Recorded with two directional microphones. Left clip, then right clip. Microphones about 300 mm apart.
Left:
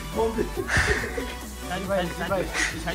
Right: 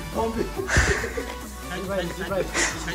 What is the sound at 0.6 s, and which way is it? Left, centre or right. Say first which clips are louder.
Speech: right 1 dB; centre.